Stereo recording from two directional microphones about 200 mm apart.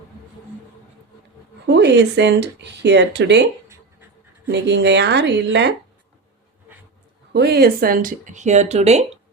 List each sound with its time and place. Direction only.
1.6 s speech: 60° right (ahead or behind)
4.5 s speech: 60° right (ahead or behind)
7.3 s speech: 55° right (ahead or behind); by 9.0 s 35° right (ahead or behind)